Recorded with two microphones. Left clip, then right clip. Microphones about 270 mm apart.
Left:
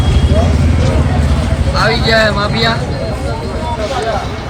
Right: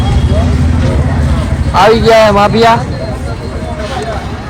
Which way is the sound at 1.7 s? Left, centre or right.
Centre.